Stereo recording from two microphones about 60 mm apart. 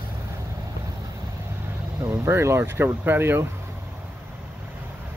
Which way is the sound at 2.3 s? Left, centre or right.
Right.